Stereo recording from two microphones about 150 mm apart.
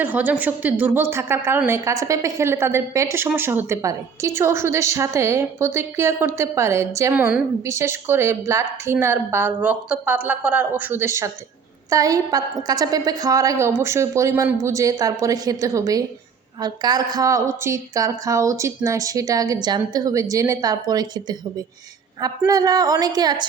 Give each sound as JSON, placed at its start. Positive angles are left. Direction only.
{"t": 0.0, "sound": "a woman's voice", "side_deg": -10}